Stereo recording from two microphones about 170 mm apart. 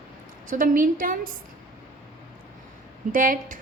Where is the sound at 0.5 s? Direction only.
55° right (ahead or behind).